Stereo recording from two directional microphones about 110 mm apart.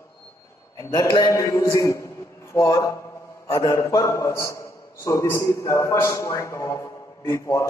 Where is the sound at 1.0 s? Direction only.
40° left (ahead or behind).